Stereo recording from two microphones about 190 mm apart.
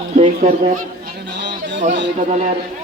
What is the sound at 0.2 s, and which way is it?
Speech, 35° right (ahead or behind).